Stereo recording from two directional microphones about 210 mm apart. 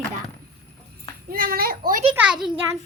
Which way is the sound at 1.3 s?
45° right (ahead or behind).